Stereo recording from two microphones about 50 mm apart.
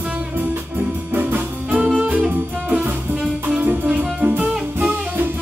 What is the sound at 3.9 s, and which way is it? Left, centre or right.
Music, right.